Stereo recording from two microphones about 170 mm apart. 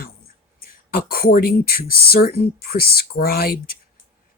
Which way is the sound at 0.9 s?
60° left (ahead or behind).